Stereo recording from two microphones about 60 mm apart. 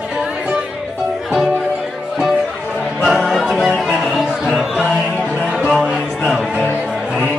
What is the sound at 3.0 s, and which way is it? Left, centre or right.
Music, centre.